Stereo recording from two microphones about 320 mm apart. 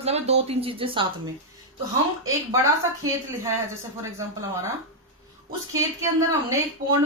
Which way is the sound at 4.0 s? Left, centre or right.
Centre.